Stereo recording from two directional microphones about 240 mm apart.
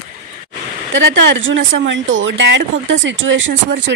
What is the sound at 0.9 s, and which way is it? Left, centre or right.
Speech, right.